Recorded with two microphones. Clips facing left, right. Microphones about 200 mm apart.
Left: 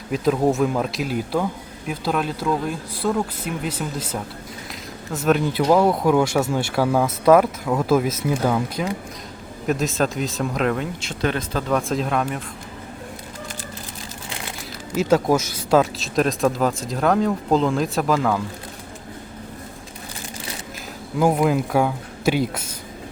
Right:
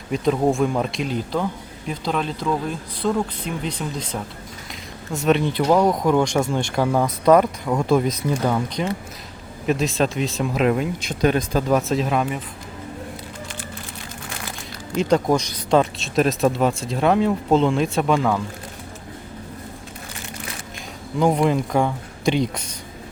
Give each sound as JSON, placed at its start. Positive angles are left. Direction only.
{"t": 0.1, "sound": "speech", "side_deg": 0}
{"t": 11.8, "sound": "speech", "side_deg": 0}
{"t": 14.9, "sound": "speech", "side_deg": 5}
{"t": 21.2, "sound": "speech", "side_deg": 5}